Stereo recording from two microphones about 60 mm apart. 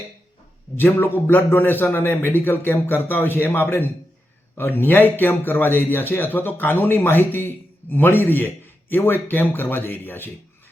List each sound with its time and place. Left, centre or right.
0.8 s a man's voice: left